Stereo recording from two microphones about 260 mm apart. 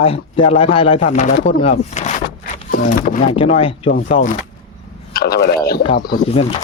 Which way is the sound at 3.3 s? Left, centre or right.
Left.